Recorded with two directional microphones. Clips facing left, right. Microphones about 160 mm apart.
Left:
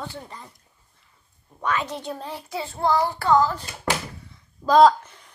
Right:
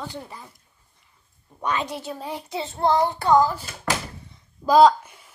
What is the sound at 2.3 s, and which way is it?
Child singing, 20° right (ahead or behind).